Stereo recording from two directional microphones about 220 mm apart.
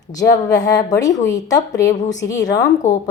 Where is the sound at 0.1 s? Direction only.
15° left (ahead or behind).